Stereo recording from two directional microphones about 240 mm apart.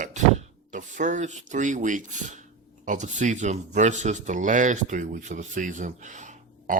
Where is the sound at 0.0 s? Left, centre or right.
Right.